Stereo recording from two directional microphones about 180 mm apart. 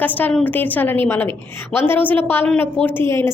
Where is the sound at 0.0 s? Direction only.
10° left (ahead or behind).